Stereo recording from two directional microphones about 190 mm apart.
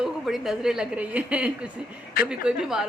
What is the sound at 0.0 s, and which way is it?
Speech, centre (ahead or behind).